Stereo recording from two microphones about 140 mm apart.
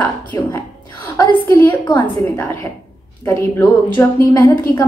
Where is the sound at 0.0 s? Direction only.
15° left (ahead or behind).